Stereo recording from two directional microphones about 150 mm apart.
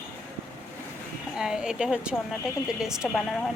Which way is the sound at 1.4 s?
5° right (ahead or behind).